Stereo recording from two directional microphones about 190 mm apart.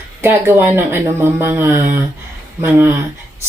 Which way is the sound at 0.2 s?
15° right (ahead or behind).